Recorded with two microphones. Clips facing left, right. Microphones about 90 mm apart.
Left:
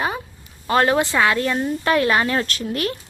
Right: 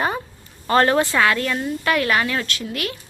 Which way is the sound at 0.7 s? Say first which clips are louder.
Right 1 dB; 15° left (ahead or behind).